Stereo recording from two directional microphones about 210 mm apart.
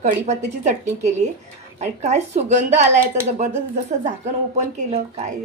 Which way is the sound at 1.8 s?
35° right (ahead or behind).